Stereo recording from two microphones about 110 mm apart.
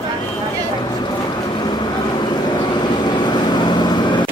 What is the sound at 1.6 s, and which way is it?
Vehicle, 40° left (ahead or behind).